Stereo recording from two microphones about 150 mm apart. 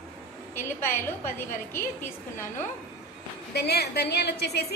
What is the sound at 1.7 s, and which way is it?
Speech, 15° left (ahead or behind).